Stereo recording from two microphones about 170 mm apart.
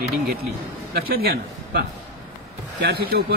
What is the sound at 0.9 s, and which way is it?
Speech, 65° right (ahead or behind).